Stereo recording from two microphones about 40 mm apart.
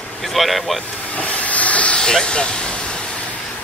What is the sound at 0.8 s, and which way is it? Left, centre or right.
Hiss, left.